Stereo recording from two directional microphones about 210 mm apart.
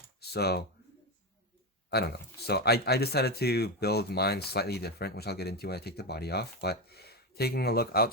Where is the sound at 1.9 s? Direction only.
50° left (ahead or behind).